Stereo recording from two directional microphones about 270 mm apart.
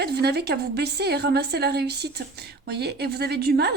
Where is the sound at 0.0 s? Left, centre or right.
Right.